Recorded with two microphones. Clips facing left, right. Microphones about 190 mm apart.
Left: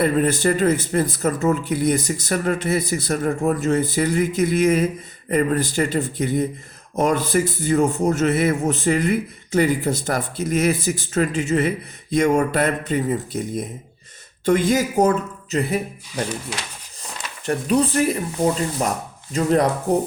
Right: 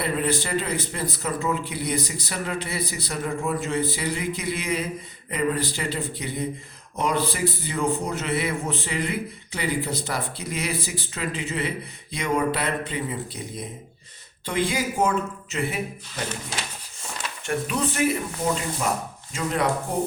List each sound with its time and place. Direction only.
0.0 s speech: 45° left (ahead or behind)
17.0 s a sound: 35° left (ahead or behind)
18.8 s speech: 40° left (ahead or behind)